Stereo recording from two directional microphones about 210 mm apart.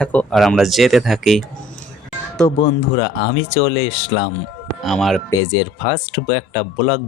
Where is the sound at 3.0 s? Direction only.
50° left (ahead or behind).